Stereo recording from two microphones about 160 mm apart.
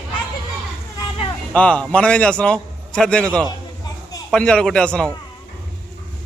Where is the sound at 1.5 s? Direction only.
5° left (ahead or behind).